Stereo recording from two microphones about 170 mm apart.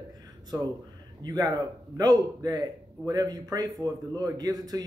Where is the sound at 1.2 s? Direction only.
25° right (ahead or behind).